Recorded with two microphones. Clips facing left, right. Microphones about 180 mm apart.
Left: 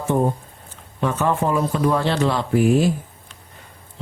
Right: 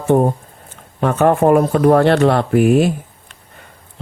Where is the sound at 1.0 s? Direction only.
60° right (ahead or behind).